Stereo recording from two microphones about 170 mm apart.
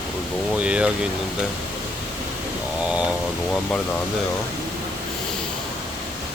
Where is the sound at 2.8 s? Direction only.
5° right (ahead or behind).